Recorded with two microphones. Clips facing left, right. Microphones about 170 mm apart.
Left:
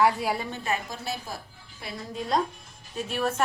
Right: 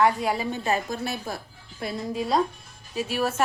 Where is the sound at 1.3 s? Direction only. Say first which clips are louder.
Right 5 dB; 60° right (ahead or behind).